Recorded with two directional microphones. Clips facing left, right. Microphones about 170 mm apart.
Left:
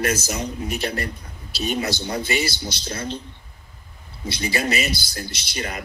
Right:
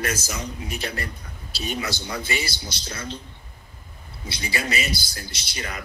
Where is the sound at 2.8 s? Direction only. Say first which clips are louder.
Left 4 dB; 35° left (ahead or behind).